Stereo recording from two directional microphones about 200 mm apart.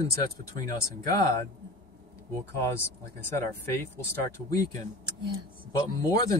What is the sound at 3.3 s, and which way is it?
Speech, 10° left (ahead or behind).